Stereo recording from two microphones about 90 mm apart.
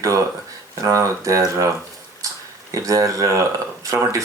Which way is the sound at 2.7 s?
40° right (ahead or behind).